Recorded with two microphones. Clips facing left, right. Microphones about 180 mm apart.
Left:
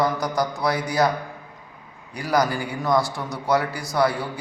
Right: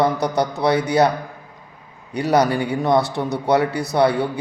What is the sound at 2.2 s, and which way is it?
Speech, 70° right (ahead or behind).